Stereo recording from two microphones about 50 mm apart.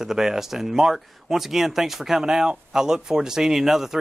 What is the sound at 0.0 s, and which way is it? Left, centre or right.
Speech, centre.